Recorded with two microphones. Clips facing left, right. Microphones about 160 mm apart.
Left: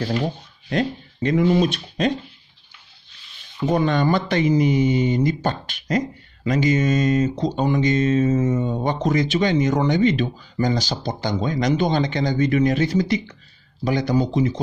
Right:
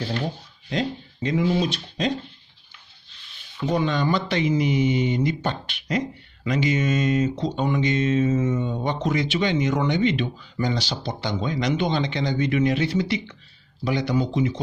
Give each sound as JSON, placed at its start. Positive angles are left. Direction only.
{"t": 0.7, "sound": "speech", "side_deg": 55}
{"t": 3.6, "sound": "speech", "side_deg": 50}